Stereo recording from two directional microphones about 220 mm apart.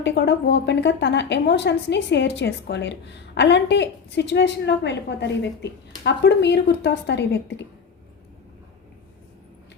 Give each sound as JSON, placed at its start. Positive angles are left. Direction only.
{"t": 0.0, "sound": "a woman's voice", "side_deg": 50}